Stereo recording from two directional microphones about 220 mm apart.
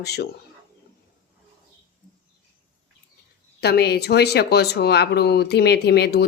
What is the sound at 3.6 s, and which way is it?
Speech, 45° left (ahead or behind).